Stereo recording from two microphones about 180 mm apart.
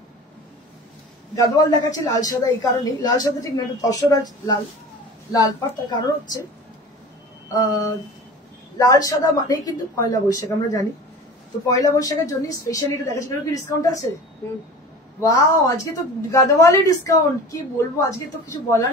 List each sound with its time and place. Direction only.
1.3 s a man's voice: 20° left (ahead or behind)
8.7 s a man's voice: 20° left (ahead or behind)
15.1 s a woman's voice: 20° left (ahead or behind)